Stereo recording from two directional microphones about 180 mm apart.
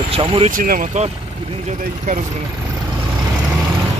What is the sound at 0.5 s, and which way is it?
Speech, 55° right (ahead or behind).